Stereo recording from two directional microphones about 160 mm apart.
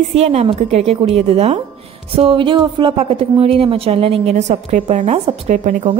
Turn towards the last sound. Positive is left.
turn(degrees=-50)  # may be behind; listen again after turning